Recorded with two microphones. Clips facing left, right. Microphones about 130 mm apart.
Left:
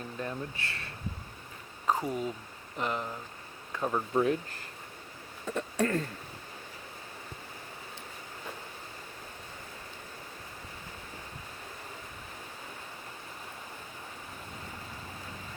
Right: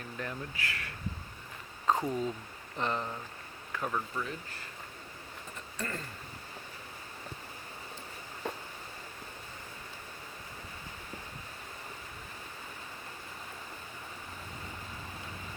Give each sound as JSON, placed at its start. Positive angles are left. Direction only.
{"t": 0.2, "sound": "speech", "side_deg": 25}
{"t": 1.9, "sound": "speech", "side_deg": 10}
{"t": 3.7, "sound": "a sound", "side_deg": 20}
{"t": 4.1, "sound": "speech", "side_deg": 55}
{"t": 5.5, "sound": "speech", "side_deg": 70}